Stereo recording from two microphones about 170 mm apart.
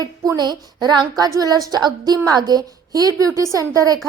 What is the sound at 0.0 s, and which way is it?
A woman's voice, 20° right (ahead or behind).